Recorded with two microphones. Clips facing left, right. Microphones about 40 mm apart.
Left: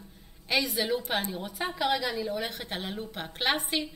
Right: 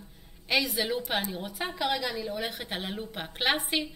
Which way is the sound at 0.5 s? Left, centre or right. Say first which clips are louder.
Even; centre.